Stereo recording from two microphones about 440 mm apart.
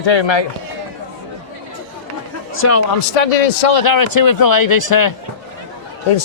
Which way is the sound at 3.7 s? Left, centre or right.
Left.